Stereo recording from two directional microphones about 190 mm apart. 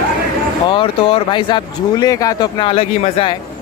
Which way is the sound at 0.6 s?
30° left (ahead or behind).